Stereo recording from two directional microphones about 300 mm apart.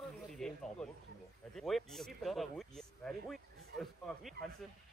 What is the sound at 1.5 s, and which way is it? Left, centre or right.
Speech, centre.